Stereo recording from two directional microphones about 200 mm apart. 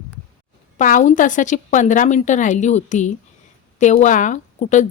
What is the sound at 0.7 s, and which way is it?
Speech, 40° left (ahead or behind).